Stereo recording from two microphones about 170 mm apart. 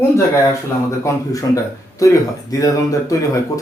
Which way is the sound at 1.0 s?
20° left (ahead or behind).